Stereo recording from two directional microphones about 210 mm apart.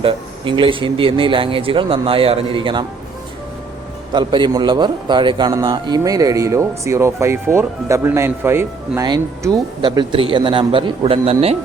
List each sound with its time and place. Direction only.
0.0 s a man's voice: 25° right (ahead or behind)
4.1 s a man's voice: 20° right (ahead or behind)